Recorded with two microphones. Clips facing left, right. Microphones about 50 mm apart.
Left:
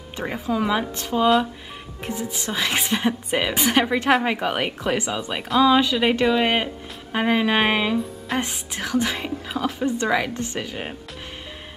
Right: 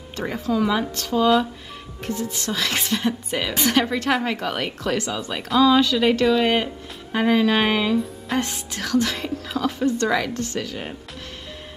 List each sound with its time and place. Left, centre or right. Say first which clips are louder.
0.2 s speech: right 2 dB; centre